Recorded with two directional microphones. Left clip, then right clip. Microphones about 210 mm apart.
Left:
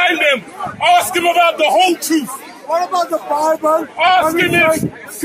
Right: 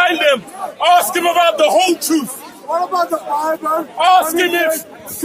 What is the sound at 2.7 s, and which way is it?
Speech, 40° left (ahead or behind).